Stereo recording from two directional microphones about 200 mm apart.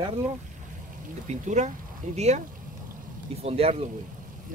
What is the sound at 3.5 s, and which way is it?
Speech, 30° right (ahead or behind).